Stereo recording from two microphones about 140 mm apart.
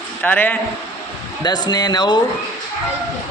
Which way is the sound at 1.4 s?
30° left (ahead or behind).